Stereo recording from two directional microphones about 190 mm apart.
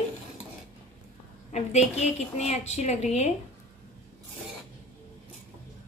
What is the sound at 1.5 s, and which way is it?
A woman's voice, 35° left (ahead or behind).